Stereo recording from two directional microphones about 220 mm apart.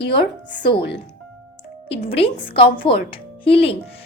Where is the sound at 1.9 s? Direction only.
25° left (ahead or behind).